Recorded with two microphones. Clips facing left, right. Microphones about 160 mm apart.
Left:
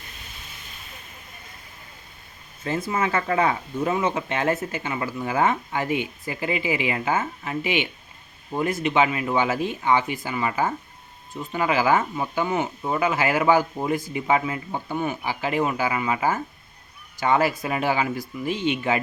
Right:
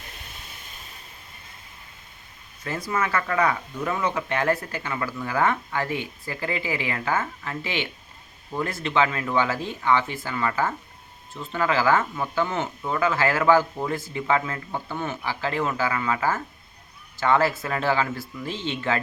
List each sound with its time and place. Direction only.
2.6 s speech: 25° left (ahead or behind)